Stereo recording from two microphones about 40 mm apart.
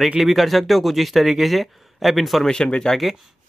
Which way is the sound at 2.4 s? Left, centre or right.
Centre.